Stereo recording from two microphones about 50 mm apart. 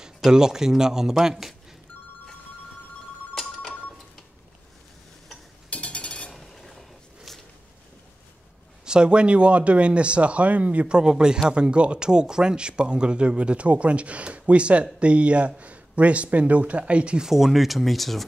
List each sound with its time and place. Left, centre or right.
0.0 s a man's voice: centre
5.7 s cutlery: left
6.3 s stir: centre
7.3 s a sound: centre
8.8 s speech: centre
17.3 s speech: centre